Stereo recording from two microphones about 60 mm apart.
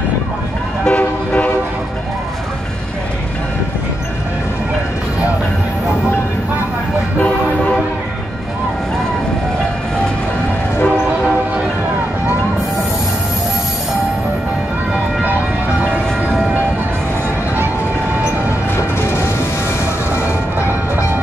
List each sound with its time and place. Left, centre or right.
0.8 s train: left
18.8 s music: left
20.5 s music: right